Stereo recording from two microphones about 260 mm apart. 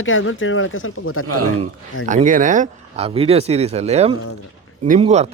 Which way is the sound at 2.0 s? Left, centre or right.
Right.